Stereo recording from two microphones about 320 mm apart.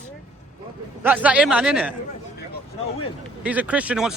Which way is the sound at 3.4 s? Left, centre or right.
Centre.